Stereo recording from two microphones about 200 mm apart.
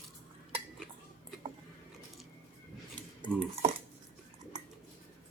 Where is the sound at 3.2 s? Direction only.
30° right (ahead or behind).